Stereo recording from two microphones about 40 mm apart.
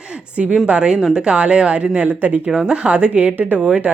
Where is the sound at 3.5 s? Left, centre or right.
Centre.